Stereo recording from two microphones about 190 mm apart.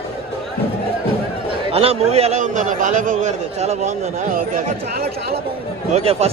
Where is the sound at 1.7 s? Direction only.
30° right (ahead or behind); by 5.0 s 45° right (ahead or behind).